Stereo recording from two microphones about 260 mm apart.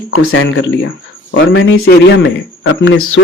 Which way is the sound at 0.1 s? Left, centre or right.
Left.